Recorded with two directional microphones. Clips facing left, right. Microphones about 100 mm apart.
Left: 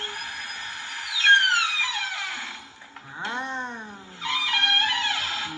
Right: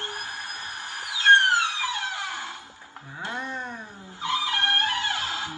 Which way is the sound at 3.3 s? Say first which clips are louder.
Left 2 dB; 20° left (ahead or behind).